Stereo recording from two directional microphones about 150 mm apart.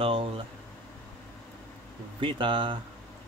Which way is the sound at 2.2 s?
35° right (ahead or behind).